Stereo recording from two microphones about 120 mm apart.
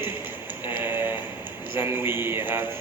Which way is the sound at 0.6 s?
15° right (ahead or behind).